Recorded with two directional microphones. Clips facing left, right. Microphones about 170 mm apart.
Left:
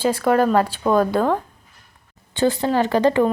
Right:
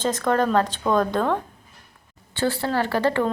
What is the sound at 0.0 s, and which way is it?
Speech, 10° left (ahead or behind).